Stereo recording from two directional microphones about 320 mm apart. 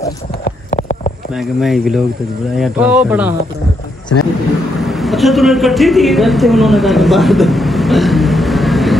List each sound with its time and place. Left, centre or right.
0.4 s clip-clop: left
1.3 s speech: centre
4.8 s a man's voice: centre